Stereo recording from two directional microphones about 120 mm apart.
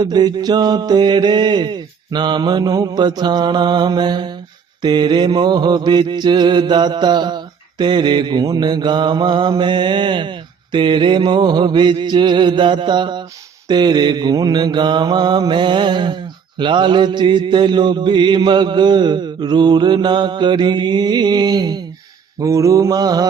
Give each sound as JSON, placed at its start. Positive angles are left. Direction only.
{"t": 0.0, "sound": "mantra", "side_deg": -35}